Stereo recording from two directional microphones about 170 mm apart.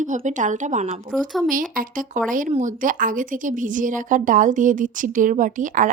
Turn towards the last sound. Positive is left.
turn(degrees=-50)  # may be behind; listen again after turning